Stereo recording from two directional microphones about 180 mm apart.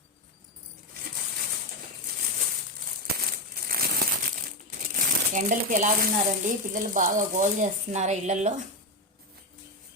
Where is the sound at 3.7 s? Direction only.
55° right (ahead or behind).